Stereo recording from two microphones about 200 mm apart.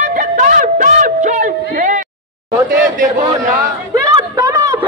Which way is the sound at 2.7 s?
40° right (ahead or behind).